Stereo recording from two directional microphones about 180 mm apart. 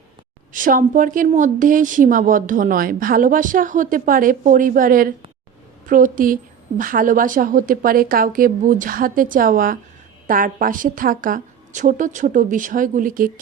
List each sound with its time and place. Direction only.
0.5 s a woman's voice: 50° right (ahead or behind)